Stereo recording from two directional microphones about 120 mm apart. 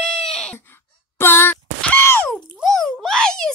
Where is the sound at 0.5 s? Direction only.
20° left (ahead or behind).